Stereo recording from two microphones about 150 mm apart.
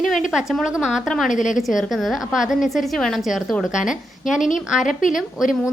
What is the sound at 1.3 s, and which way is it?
Speech, 55° left (ahead or behind).